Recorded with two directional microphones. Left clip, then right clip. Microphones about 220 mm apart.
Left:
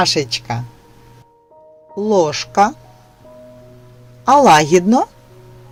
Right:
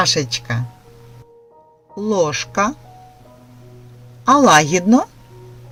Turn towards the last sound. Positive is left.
turn(degrees=20)  # may be behind; listen again after turning